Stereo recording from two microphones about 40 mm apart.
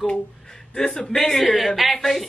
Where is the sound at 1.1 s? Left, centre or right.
Centre.